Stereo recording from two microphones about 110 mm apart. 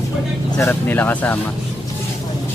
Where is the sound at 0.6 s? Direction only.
20° left (ahead or behind).